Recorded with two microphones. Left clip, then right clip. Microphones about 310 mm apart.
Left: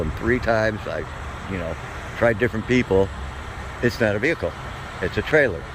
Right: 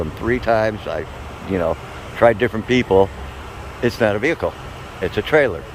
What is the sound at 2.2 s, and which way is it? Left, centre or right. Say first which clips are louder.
Speech: right 6 dB; centre.